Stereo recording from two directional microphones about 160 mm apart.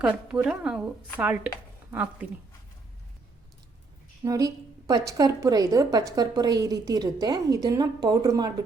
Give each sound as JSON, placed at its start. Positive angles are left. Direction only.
{"t": 0.0, "sound": "a woman's voice", "side_deg": -5}
{"t": 1.9, "sound": "speech", "side_deg": -10}
{"t": 4.2, "sound": "a woman's voice", "side_deg": -20}